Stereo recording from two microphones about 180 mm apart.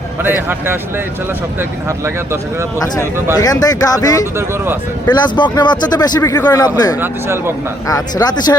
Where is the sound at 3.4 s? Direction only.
20° left (ahead or behind).